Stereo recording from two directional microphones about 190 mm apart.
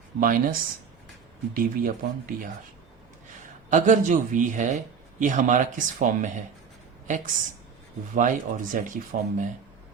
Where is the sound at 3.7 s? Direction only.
40° right (ahead or behind).